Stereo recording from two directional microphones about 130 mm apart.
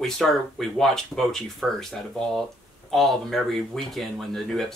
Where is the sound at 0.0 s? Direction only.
5° left (ahead or behind).